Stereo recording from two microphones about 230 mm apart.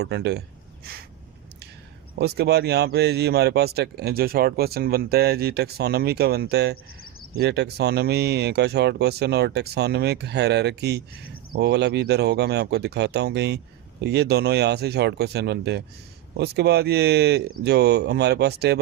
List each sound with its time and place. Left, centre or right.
0.0 s speech: right
2.1 s speech: right